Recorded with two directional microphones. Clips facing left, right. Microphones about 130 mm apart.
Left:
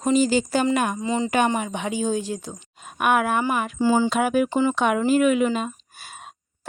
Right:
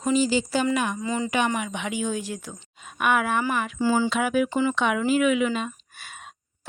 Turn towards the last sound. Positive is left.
turn(degrees=40)  # may be behind; listen again after turning